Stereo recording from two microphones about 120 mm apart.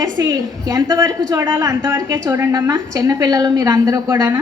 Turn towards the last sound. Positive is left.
turn(degrees=-30)  # may be behind; listen again after turning